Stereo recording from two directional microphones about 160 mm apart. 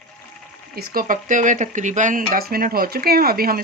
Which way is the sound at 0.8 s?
60° right (ahead or behind).